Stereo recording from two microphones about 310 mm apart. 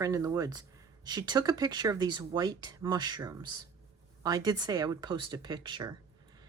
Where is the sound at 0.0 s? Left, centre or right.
Centre.